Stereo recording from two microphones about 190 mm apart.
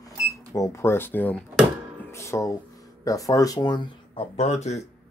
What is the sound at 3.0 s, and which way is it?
Speech, 20° left (ahead or behind).